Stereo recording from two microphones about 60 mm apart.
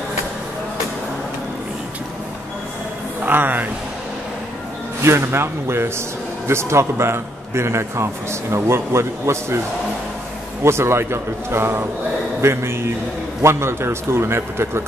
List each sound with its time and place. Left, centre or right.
3.3 s speech: right
5.0 s a man's voice: right
10.6 s a man's voice: right